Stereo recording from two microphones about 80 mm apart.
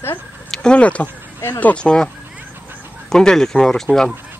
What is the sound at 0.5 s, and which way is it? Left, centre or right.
Speech, centre.